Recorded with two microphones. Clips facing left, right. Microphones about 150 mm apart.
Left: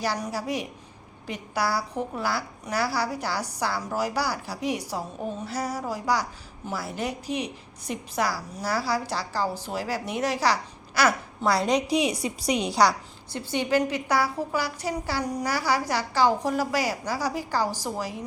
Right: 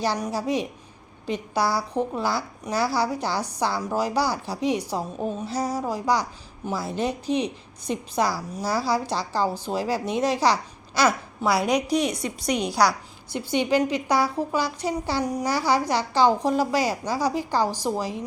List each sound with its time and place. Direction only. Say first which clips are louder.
0.0 s a woman's voice: right 3 dB; 20° right (ahead or behind)
11.4 s a woman's voice: right 1 dB; 10° right (ahead or behind)
13.3 s a woman's voice: right 2 dB; 15° right (ahead or behind)